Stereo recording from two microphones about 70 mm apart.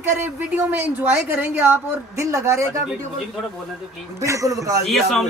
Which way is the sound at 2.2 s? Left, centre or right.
Right.